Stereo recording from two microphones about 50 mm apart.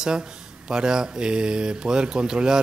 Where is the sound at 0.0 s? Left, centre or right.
Centre.